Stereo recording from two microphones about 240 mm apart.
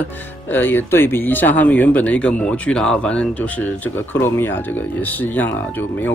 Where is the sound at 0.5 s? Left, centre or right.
Centre.